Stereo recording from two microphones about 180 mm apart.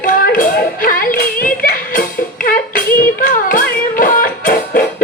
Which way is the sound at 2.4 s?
50° left (ahead or behind).